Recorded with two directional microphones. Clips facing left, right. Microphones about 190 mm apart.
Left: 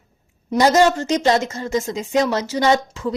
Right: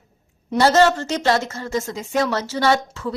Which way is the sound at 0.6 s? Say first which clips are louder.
Left 1 dB; 15° left (ahead or behind).